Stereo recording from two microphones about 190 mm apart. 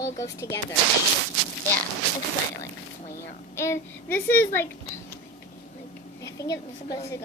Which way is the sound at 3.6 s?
10° left (ahead or behind).